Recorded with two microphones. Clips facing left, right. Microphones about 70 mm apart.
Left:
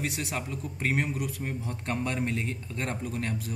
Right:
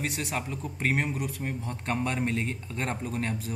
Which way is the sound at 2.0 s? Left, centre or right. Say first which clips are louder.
Right 1 dB; centre.